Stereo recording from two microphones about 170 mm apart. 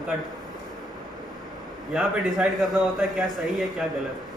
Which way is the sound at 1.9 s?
5° right (ahead or behind).